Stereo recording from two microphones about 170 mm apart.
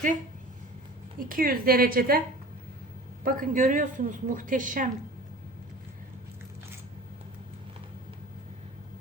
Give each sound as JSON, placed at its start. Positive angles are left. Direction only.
{"t": 1.3, "sound": "a woman's voice", "side_deg": -60}
{"t": 3.2, "sound": "a woman's voice", "side_deg": -55}